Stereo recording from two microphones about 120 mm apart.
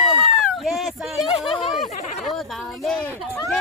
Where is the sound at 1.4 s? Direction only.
45° left (ahead or behind).